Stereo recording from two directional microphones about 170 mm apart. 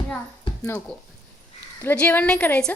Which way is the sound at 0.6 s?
15° left (ahead or behind).